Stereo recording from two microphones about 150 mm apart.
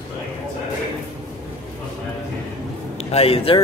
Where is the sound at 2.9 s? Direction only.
40° left (ahead or behind).